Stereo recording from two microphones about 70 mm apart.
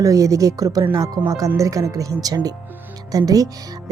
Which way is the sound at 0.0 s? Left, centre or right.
Right.